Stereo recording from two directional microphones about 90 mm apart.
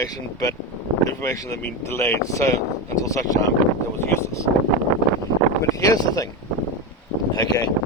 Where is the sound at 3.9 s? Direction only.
30° left (ahead or behind).